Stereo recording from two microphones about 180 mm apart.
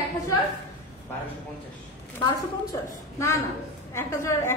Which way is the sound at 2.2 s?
20° left (ahead or behind).